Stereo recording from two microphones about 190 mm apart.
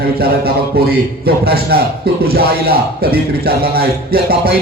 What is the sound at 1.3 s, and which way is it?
A man's voice, 55° right (ahead or behind).